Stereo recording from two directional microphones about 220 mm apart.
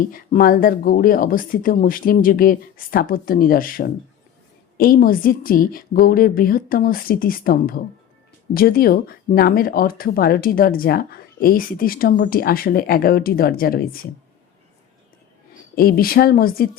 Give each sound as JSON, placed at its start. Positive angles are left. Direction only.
{"t": 0.1, "sound": "speech", "side_deg": 40}
{"t": 15.7, "sound": "speech", "side_deg": 40}